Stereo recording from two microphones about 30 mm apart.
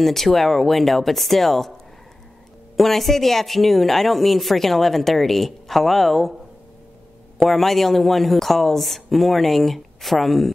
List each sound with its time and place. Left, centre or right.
0.0 s speech: centre
2.8 s speech: centre
7.4 s speech: centre